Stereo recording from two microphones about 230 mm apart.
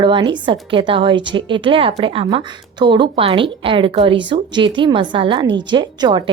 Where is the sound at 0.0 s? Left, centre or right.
Right.